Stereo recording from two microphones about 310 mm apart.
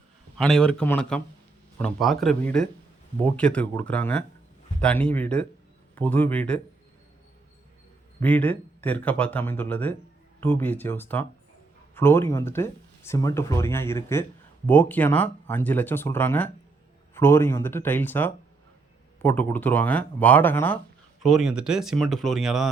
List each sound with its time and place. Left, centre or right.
0.3 s speech: centre
8.2 s speech: centre